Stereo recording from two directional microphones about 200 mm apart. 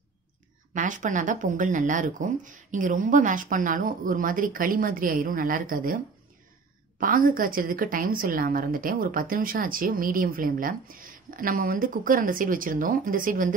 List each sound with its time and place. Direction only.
0.7 s speech: 40° right (ahead or behind)
7.0 s a woman's voice: 45° right (ahead or behind)